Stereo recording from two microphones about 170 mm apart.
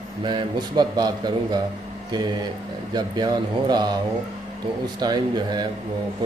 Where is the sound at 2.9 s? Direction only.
25° right (ahead or behind).